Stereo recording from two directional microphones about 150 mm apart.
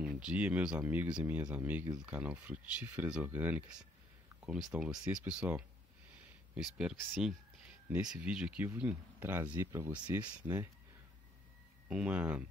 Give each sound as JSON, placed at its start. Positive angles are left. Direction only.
{"t": 0.0, "sound": "speech", "side_deg": -5}
{"t": 11.9, "sound": "speech", "side_deg": -10}